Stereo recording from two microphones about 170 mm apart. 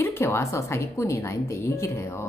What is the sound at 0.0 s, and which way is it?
A woman's voice, 15° left (ahead or behind).